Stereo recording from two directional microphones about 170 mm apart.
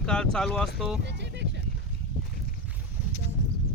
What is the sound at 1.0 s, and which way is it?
Horse, 90° right.